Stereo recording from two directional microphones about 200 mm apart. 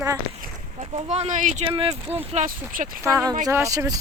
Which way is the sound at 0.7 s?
30° right (ahead or behind).